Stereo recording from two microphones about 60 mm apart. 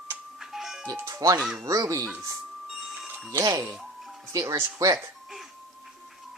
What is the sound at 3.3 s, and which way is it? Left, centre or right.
Speech, right.